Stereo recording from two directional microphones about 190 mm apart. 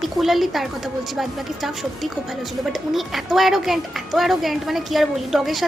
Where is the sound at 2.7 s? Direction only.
Centre (ahead or behind).